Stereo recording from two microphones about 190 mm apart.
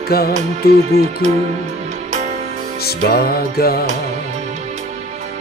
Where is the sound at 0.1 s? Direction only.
55° left (ahead or behind).